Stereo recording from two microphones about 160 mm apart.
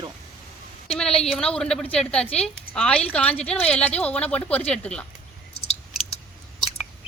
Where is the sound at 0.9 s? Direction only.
5° left (ahead or behind).